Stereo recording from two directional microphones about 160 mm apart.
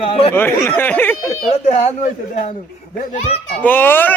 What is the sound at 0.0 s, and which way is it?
Speech, 35° left (ahead or behind).